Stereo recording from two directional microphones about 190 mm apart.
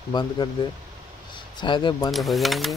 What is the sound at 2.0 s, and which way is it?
Speech, centre (ahead or behind).